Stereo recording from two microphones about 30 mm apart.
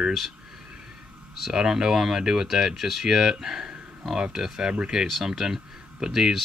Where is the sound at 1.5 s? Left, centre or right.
Centre.